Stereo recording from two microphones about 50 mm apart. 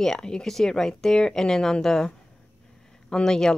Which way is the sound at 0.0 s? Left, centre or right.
Centre.